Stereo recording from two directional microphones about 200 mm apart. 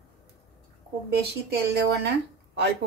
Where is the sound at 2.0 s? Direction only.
60° right (ahead or behind).